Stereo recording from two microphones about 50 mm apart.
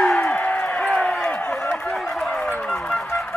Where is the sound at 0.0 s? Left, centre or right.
Centre.